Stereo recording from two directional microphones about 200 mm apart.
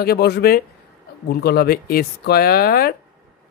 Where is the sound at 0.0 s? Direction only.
50° left (ahead or behind).